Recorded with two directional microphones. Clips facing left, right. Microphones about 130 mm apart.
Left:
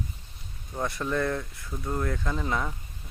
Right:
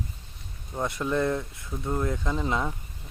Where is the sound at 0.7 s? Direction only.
15° right (ahead or behind).